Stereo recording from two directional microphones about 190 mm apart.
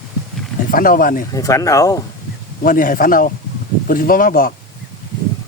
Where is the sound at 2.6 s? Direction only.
45° left (ahead or behind).